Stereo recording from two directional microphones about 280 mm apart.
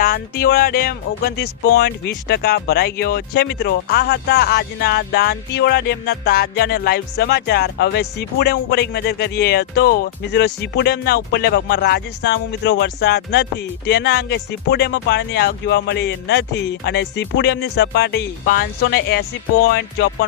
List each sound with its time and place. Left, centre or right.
0.0 s speech: left